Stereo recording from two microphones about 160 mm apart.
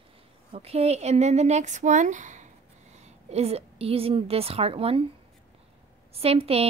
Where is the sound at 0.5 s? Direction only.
40° right (ahead or behind).